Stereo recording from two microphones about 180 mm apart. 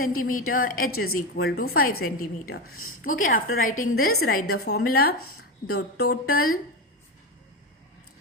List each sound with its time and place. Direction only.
0.2 s a woman's voice: 50° left (ahead or behind)